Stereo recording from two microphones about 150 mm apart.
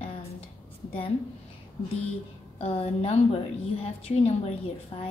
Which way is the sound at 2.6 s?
40° left (ahead or behind).